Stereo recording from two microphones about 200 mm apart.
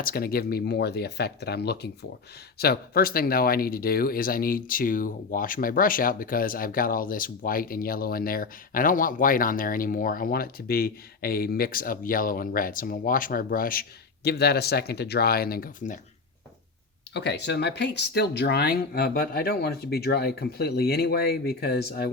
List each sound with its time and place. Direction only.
0.0 s speech: 45° left (ahead or behind)
17.2 s speech: 60° left (ahead or behind)